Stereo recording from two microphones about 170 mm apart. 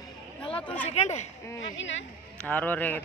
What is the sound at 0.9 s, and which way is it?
Speech, 40° left (ahead or behind).